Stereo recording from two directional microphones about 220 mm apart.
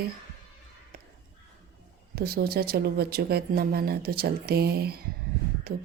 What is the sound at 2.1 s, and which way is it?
A woman's voice, 45° right (ahead or behind).